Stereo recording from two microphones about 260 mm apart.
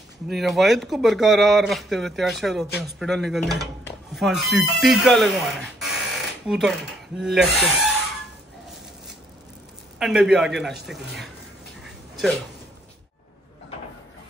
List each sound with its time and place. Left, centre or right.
0.3 s speech: centre
9.9 s speech: centre
11.8 s a sound: centre